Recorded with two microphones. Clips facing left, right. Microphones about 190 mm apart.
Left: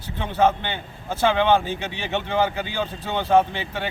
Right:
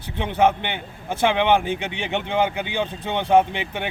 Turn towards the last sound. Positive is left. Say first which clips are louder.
# right 1 dB
turn(degrees=-15)  # may be behind; listen again after turning